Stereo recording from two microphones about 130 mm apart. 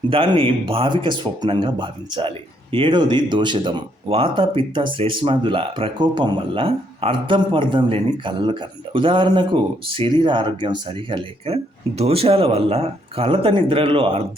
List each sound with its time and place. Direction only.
0.1 s speech: 45° right (ahead or behind)